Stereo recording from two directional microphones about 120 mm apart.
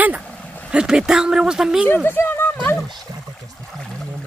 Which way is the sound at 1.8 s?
15° left (ahead or behind).